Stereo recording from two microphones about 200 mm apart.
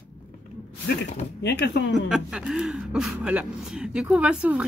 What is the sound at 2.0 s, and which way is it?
Speech, 5° right (ahead or behind).